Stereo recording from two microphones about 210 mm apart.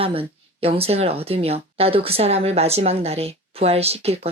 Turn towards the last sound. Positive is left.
turn(degrees=-30)  # may be behind; listen again after turning